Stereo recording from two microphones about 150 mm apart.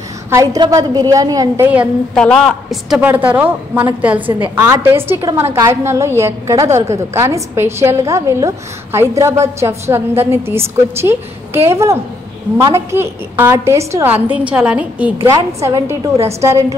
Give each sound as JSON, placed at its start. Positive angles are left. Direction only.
{"t": 0.3, "sound": "a woman's voice", "side_deg": -20}
{"t": 2.1, "sound": "a woman's voice", "side_deg": 5}
{"t": 15.1, "sound": "a woman's voice", "side_deg": -25}